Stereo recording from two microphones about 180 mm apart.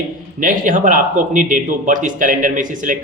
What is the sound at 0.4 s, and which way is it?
A man's voice, 50° right (ahead or behind).